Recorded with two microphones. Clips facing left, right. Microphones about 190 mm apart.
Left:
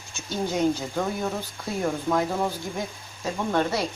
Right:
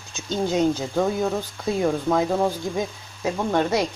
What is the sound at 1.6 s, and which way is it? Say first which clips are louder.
Speech: right 5 dB; 20° right (ahead or behind).